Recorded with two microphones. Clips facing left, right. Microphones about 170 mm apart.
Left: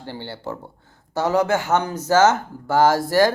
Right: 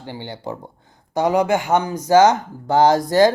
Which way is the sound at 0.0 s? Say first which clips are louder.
Right 1 dB; 15° right (ahead or behind).